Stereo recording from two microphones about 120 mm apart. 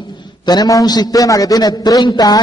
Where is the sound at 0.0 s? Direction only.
40° left (ahead or behind).